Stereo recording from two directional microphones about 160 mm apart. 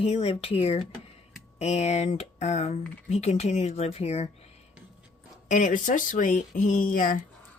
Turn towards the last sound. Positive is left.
turn(degrees=55)  # may be behind; listen again after turning